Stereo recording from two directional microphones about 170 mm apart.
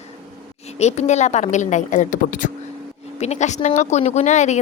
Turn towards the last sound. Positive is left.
turn(degrees=45)  # may be behind; listen again after turning